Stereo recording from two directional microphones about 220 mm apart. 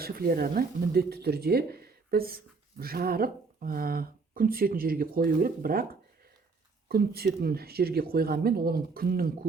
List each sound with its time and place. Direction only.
0.0 s speech: 45° right (ahead or behind)